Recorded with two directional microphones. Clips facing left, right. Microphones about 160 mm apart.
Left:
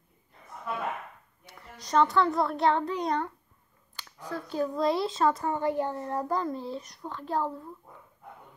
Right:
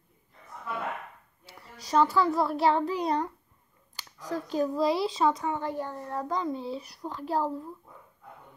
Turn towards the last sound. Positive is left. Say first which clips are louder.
# right 1 dB
turn(degrees=-10)  # may be behind; listen again after turning